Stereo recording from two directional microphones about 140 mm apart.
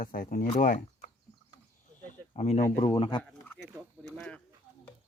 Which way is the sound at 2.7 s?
40° left (ahead or behind).